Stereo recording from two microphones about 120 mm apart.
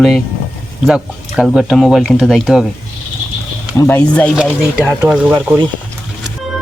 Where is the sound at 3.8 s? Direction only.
15° left (ahead or behind).